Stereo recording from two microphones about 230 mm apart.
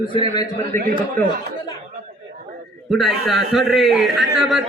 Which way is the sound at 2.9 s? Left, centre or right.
Centre.